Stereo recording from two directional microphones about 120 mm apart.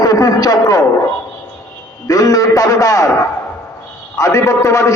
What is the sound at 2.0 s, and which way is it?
A man's voice, 30° left (ahead or behind).